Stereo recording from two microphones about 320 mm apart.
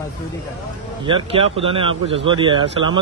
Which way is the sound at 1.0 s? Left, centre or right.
Centre.